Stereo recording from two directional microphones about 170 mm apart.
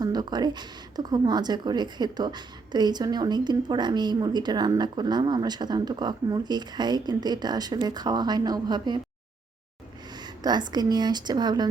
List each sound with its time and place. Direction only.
0.0 s a woman's voice: 25° right (ahead or behind)
10.2 s a woman's voice: 25° right (ahead or behind)